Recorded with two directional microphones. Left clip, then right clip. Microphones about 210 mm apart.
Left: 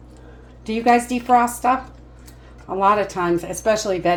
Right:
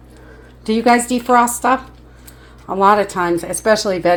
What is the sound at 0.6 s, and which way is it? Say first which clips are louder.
A woman's voice: right 3 dB; 45° right (ahead or behind).